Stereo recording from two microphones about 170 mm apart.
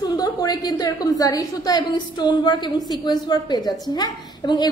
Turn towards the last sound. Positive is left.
turn(degrees=25)  # may be behind; listen again after turning